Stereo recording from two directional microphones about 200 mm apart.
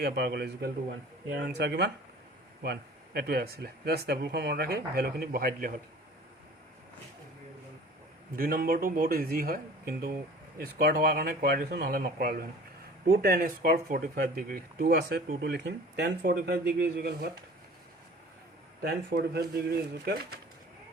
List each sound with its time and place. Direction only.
0.0 s a man's voice: 55° right (ahead or behind)
8.4 s speech: 50° right (ahead or behind)
18.8 s speech: 55° right (ahead or behind)